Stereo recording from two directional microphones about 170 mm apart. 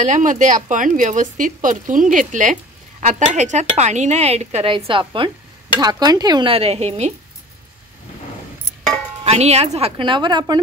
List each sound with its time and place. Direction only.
0.0 s speech: 50° right (ahead or behind)
9.2 s a woman's voice: 40° right (ahead or behind)